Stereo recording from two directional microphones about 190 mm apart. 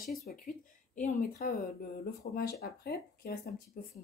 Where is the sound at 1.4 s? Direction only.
55° left (ahead or behind).